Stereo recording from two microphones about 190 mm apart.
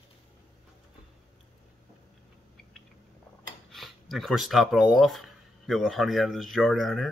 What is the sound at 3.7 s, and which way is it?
Speech, centre (ahead or behind).